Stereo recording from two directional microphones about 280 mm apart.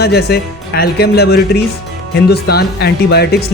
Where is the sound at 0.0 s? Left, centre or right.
Left.